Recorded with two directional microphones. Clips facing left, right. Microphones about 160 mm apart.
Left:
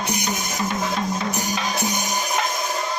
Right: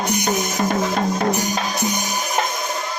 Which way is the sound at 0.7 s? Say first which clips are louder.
Right 3 dB; 50° right (ahead or behind).